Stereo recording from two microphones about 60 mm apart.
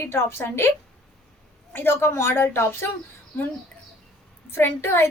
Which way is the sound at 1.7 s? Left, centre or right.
Left.